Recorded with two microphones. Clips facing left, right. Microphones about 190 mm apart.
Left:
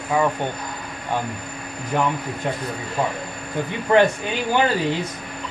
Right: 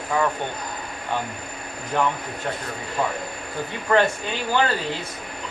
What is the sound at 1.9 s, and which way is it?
Speech, 10° left (ahead or behind).